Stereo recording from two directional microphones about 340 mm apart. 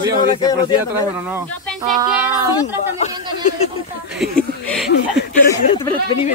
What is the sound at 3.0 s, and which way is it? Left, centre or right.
Speech, centre.